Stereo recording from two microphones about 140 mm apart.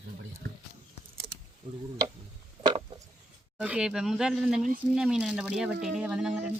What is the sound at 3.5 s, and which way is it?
Speech, 10° right (ahead or behind).